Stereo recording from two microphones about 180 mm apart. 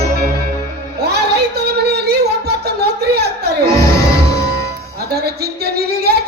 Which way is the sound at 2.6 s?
60° right (ahead or behind).